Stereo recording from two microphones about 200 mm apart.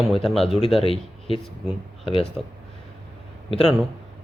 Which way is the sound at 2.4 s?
Centre (ahead or behind).